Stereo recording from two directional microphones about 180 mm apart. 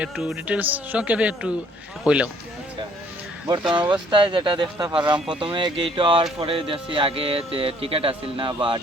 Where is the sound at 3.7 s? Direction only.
25° right (ahead or behind).